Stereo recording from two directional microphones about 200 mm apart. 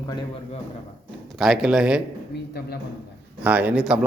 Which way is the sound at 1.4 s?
Centre (ahead or behind).